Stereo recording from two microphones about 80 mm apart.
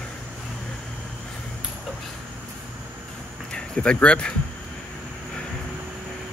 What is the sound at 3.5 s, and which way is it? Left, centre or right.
Speech, centre.